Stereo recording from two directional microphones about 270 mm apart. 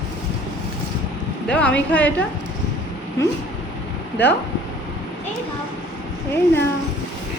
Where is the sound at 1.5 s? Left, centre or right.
Centre.